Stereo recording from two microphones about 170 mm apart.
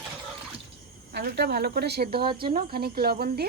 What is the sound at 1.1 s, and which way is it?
Speech, 70° right (ahead or behind).